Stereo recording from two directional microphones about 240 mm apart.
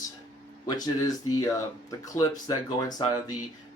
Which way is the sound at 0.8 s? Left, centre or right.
Centre.